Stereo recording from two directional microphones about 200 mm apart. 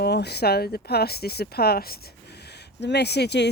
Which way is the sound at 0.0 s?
55° left (ahead or behind).